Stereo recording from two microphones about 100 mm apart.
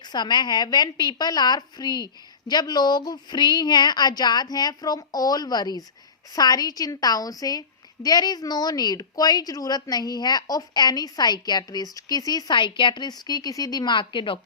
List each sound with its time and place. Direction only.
0.1 s a woman's voice: 50° left (ahead or behind)